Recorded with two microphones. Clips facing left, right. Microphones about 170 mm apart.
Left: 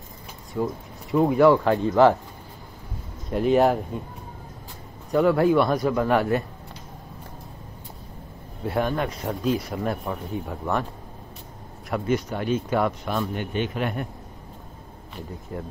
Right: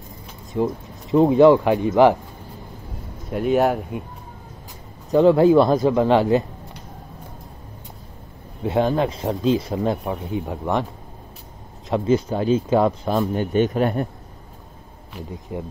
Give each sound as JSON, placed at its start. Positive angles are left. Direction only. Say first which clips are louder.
{"t": 0.5, "sound": "speech", "louder": "right 4 dB", "side_deg": -20}
{"t": 3.3, "sound": "speech", "louder": "even", "side_deg": 0}
{"t": 5.1, "sound": "speech", "louder": "right 5 dB", "side_deg": -20}
{"t": 8.6, "sound": "speech", "louder": "right 5 dB", "side_deg": -25}
{"t": 10.0, "sound": "speech", "louder": "right 4 dB", "side_deg": -15}
{"t": 11.9, "sound": "speech", "louder": "right 5 dB", "side_deg": -30}
{"t": 13.3, "sound": "a man's voice", "louder": "right 8 dB", "side_deg": -40}
{"t": 15.5, "sound": "speech", "louder": "right 4 dB", "side_deg": -15}